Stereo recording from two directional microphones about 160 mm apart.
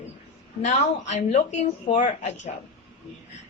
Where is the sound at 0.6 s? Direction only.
45° left (ahead or behind).